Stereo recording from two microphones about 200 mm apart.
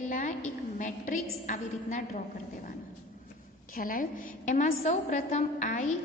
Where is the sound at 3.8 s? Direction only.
45° left (ahead or behind).